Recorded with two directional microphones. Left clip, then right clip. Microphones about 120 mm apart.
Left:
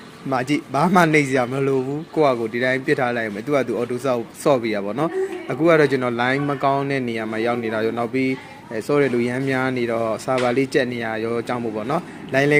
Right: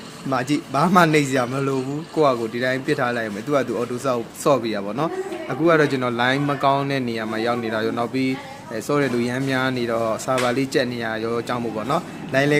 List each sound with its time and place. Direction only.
0.3 s speech: 15° left (ahead or behind)